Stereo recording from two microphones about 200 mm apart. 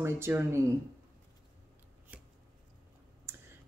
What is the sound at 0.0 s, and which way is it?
Speech, 10° right (ahead or behind).